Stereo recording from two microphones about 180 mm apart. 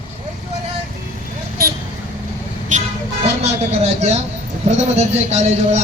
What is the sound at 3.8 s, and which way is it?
A man's voice, 35° right (ahead or behind).